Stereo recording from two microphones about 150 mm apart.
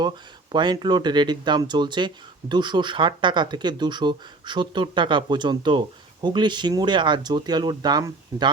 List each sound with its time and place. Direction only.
0.5 s speech: 30° right (ahead or behind)